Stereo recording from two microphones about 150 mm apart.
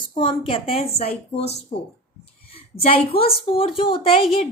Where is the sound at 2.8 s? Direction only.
40° left (ahead or behind).